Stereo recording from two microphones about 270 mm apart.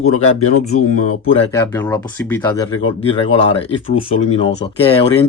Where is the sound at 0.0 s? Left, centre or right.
Left.